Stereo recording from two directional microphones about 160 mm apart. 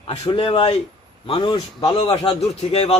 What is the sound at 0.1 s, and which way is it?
A man's voice, 35° left (ahead or behind).